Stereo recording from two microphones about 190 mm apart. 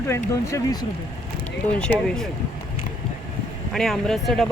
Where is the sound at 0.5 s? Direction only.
20° left (ahead or behind).